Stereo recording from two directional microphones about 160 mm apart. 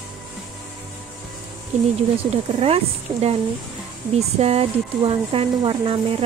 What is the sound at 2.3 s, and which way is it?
Speech, 40° right (ahead or behind).